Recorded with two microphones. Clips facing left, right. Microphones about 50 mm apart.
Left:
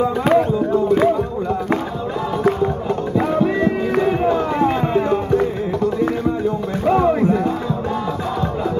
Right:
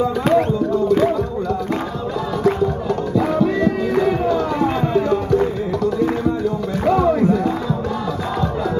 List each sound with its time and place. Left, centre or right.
0.3 s a sound: centre
3.2 s music: left
6.9 s music: left